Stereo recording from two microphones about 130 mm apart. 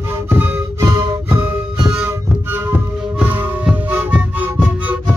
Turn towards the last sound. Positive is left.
turn(degrees=-10)  # may be behind; listen again after turning